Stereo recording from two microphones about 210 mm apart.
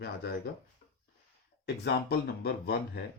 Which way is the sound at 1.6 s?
50° left (ahead or behind).